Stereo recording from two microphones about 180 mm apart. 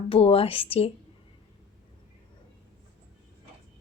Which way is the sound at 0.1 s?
30° left (ahead or behind).